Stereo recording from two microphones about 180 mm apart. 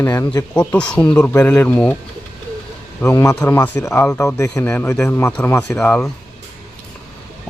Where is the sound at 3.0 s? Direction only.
15° left (ahead or behind).